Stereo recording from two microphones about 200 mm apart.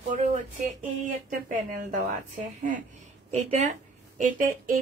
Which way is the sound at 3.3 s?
35° right (ahead or behind).